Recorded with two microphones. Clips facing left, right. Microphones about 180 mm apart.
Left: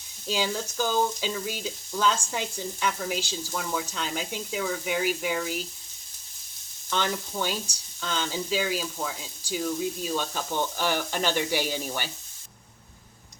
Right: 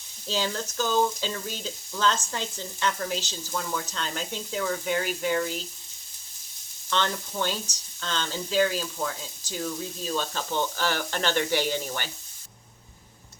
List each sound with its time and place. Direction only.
0.3 s frying: 10° left (ahead or behind)
6.9 s frying: 10° left (ahead or behind)